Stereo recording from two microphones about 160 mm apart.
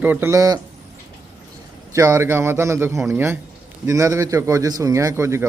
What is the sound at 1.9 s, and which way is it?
A man's voice, 20° right (ahead or behind).